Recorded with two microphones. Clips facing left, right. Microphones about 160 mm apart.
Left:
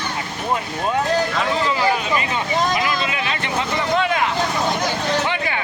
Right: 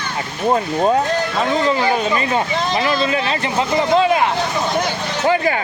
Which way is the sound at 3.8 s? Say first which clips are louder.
Right 6 dB; 30° right (ahead or behind).